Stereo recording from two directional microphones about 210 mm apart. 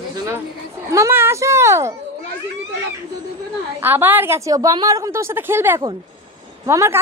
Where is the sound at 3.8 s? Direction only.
10° right (ahead or behind).